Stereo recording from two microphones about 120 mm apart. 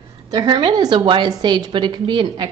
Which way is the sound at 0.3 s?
35° right (ahead or behind).